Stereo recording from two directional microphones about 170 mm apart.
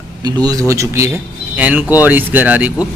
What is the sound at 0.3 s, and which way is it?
A man's voice, 25° right (ahead or behind).